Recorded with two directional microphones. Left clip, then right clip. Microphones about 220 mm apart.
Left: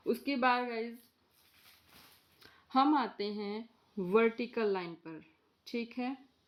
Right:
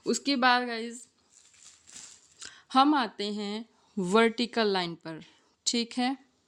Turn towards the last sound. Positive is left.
turn(degrees=-45)  # may be behind; listen again after turning